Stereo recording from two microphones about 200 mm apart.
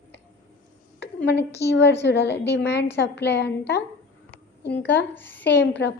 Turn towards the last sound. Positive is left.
turn(degrees=60)  # may be behind; listen again after turning